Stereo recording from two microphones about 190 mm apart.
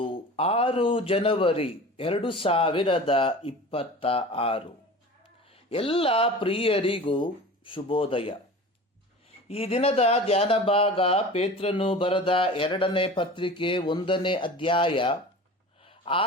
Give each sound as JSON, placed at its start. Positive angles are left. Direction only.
{"t": 0.0, "sound": "speech", "side_deg": 30}
{"t": 9.5, "sound": "speech", "side_deg": 30}